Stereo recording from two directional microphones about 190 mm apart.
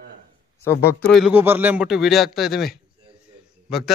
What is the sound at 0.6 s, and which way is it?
Speech, 15° left (ahead or behind).